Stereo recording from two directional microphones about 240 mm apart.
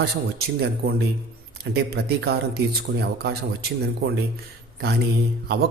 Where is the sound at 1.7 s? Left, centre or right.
Right.